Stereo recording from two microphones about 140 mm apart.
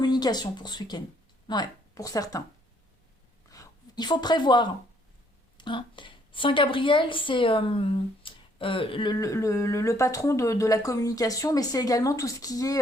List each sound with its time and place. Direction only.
0.0 s speech: 30° left (ahead or behind)
3.5 s a woman's voice: 25° left (ahead or behind)